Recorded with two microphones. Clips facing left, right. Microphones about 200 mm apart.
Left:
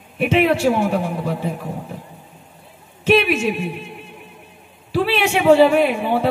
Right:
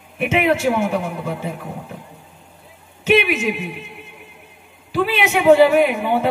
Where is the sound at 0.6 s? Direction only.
30° left (ahead or behind).